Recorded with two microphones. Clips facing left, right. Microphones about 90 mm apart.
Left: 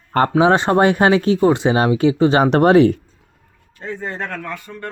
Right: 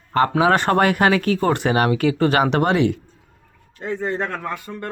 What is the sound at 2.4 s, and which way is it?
Speech, 40° left (ahead or behind).